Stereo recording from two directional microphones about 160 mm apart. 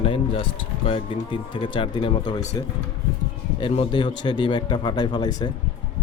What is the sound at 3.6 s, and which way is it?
Speech, 30° left (ahead or behind).